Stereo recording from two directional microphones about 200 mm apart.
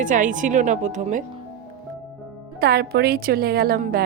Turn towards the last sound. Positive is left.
turn(degrees=-50)  # may be behind; listen again after turning